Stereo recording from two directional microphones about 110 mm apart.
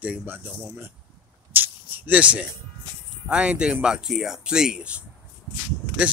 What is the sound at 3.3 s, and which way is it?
Speech, 10° right (ahead or behind).